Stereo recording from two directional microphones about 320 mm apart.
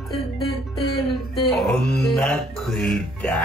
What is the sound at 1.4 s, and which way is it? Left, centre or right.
Speech, centre.